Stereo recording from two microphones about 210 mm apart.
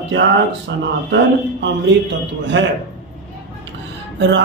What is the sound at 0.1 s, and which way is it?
Speech, 55° right (ahead or behind).